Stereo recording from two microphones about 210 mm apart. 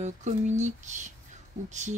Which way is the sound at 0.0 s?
35° right (ahead or behind).